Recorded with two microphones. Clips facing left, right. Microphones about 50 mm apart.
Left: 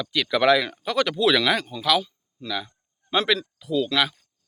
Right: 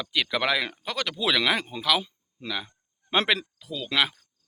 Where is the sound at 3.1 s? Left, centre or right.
Right.